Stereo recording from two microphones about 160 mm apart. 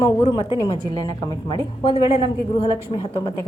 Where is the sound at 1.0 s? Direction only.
20° left (ahead or behind).